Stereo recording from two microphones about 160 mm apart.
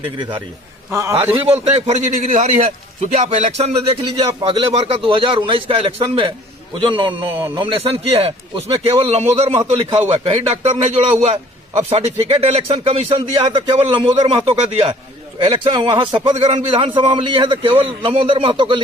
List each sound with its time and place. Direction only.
0.9 s a man's voice: 15° right (ahead or behind)
1.9 s a man's voice: 45° right (ahead or behind); by 18.8 s 30° right (ahead or behind)